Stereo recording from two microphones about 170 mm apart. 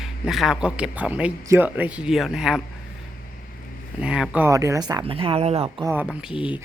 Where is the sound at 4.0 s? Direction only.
5° right (ahead or behind).